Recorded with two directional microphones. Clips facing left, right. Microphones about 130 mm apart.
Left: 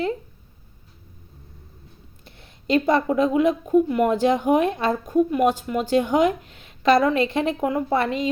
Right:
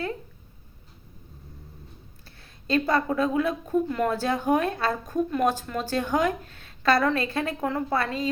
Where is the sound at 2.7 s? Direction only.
20° left (ahead or behind).